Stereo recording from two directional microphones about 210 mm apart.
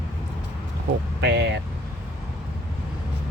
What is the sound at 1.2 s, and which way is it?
Speech, 55° right (ahead or behind).